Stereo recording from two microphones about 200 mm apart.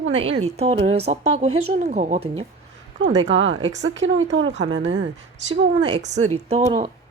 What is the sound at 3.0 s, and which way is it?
Speech, 70° right (ahead or behind).